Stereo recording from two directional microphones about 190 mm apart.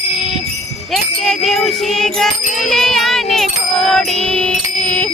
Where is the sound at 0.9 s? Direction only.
Centre (ahead or behind).